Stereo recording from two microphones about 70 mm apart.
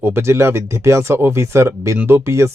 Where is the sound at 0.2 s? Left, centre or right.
Right.